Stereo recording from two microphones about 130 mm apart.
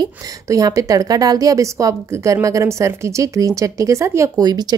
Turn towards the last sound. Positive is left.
turn(degrees=-30)  # may be behind; listen again after turning